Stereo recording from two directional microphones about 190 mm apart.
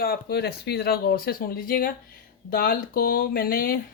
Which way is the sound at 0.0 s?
55° left (ahead or behind).